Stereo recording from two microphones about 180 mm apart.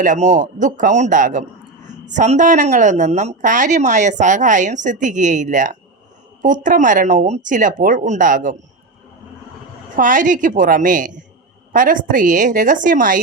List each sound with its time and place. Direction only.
0.0 s a woman's voice: 45° right (ahead or behind)
9.9 s speech: 45° right (ahead or behind)